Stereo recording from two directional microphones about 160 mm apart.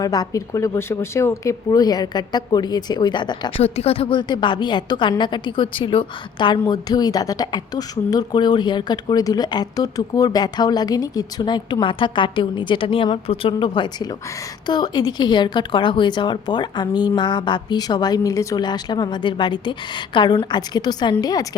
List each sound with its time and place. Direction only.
0.0 s a woman's voice: 25° left (ahead or behind)
3.6 s a woman's voice: 40° left (ahead or behind); by 21.4 s 25° left (ahead or behind)